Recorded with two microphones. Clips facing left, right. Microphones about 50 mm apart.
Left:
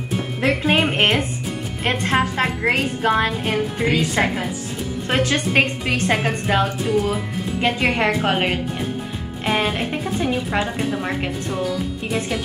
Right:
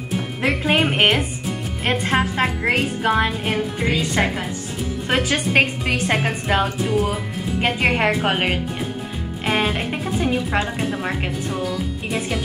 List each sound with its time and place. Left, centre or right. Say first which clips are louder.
0.4 s speech: left 1 dB; centre
5.0 s a woman's voice: left 1 dB; centre